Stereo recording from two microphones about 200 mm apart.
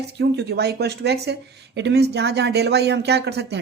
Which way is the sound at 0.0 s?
55° right (ahead or behind).